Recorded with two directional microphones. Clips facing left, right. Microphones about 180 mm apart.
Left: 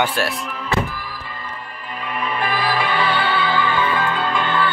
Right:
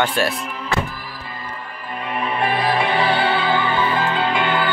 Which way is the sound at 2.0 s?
25° right (ahead or behind).